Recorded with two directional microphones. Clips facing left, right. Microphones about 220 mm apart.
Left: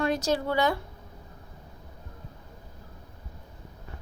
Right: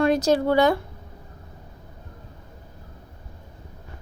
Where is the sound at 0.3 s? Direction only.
60° right (ahead or behind).